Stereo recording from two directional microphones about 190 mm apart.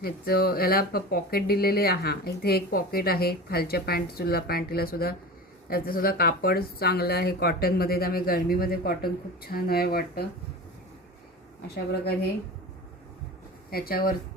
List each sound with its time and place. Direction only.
0.0 s speech: 55° left (ahead or behind)
13.7 s speech: 50° left (ahead or behind)